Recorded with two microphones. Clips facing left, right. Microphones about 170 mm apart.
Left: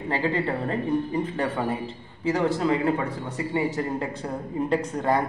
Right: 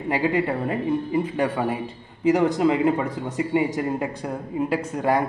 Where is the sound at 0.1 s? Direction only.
15° right (ahead or behind).